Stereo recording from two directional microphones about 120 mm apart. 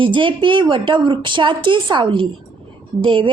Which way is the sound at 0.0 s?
45° right (ahead or behind).